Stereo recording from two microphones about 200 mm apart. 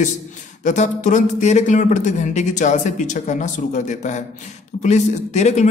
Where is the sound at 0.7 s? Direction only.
40° left (ahead or behind).